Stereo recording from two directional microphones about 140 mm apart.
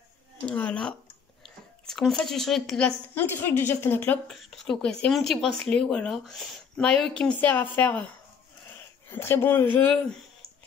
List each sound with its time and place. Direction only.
0.5 s a woman's voice: 10° left (ahead or behind)
3.2 s a woman's voice: 15° left (ahead or behind)
4.3 s a woman's voice: centre (ahead or behind)
9.1 s a woman's voice: 15° left (ahead or behind)